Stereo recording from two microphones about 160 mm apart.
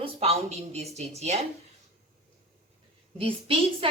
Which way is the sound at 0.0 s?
40° right (ahead or behind).